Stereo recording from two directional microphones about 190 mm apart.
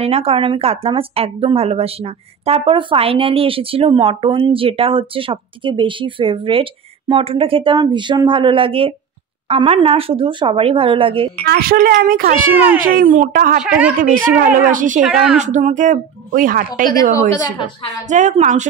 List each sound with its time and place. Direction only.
0.0 s speech: 30° right (ahead or behind)
11.4 s a woman's voice: 55° right (ahead or behind)
15.0 s a woman's voice: 5° right (ahead or behind)
15.3 s a woman's voice: 40° right (ahead or behind)
16.9 s a woman's voice: 20° left (ahead or behind)
18.0 s a woman's voice: 40° right (ahead or behind)